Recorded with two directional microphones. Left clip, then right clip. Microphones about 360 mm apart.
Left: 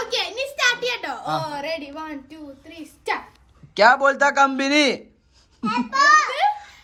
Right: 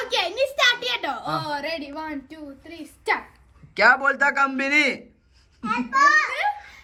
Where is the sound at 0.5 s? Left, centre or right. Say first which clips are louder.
Left 2 dB; centre.